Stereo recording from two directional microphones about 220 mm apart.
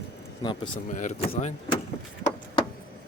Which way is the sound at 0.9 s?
35° left (ahead or behind).